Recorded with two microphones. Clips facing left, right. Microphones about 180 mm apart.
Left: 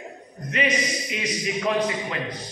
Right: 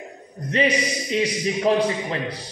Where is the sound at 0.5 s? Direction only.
30° right (ahead or behind).